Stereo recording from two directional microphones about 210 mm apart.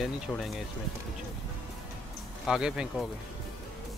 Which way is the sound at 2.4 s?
5° right (ahead or behind).